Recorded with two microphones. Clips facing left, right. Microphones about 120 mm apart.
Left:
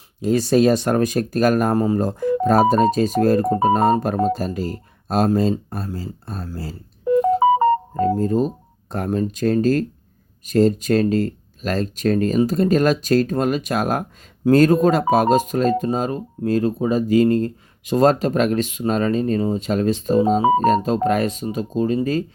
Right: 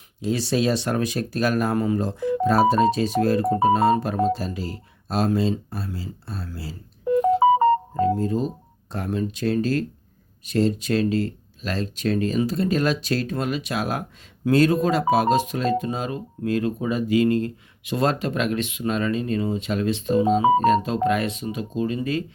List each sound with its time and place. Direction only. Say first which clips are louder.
0.2 s speech: left 7 dB; 45° left (ahead or behind)
7.9 s speech: left 3 dB; 45° left (ahead or behind)